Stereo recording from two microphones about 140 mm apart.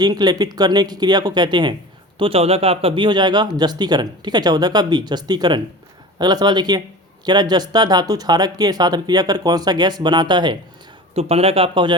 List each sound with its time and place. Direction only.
0.0 s speech: 30° right (ahead or behind)
11.1 s speech: 45° right (ahead or behind)